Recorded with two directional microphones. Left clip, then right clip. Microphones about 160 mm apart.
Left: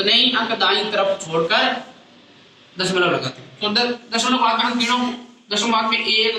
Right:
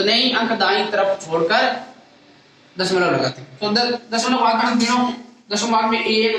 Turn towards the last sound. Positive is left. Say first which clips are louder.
# even
turn(degrees=-45)  # may be behind; listen again after turning